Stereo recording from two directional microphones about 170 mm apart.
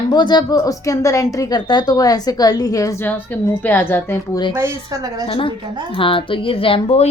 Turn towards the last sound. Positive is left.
turn(degrees=35)  # may be behind; listen again after turning